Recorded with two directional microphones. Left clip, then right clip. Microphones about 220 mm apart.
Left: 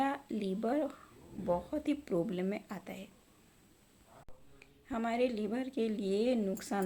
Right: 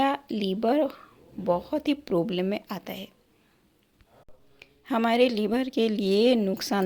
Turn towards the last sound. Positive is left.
turn(degrees=-40)  # may be behind; listen again after turning